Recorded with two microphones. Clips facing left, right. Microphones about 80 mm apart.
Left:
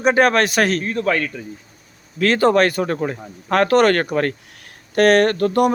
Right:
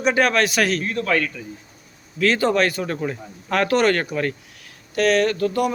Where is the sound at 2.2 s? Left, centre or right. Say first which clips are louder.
Left 4 dB; left.